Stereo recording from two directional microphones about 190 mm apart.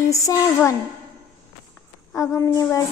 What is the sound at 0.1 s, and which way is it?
Speech, 15° left (ahead or behind).